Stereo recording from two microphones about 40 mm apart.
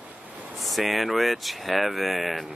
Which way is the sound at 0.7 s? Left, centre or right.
Centre.